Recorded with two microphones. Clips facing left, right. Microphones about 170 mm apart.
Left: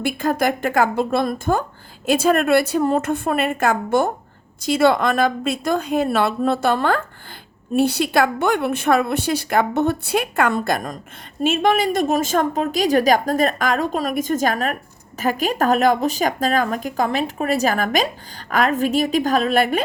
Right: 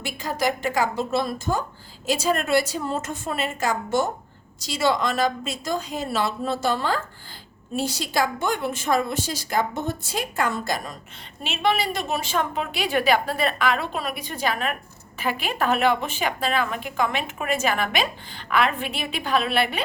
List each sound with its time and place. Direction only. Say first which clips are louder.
0.0 s a woman's voice: left 6 dB; 55° left (ahead or behind)